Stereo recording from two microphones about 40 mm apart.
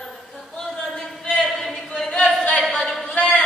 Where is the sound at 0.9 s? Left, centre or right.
Left.